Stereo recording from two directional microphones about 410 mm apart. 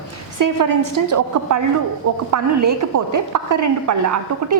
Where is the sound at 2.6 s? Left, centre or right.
Right.